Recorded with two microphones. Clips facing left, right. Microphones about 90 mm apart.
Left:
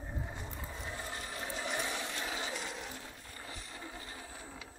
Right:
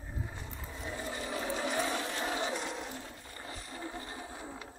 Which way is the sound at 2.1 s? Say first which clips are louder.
Right 5 dB; 45° right (ahead or behind).